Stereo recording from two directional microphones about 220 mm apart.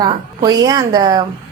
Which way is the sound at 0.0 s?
15° right (ahead or behind).